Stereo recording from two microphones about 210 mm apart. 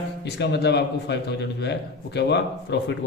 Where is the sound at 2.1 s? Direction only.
55° left (ahead or behind).